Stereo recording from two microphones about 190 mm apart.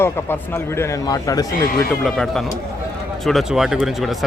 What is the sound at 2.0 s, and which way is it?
Speech, centre (ahead or behind).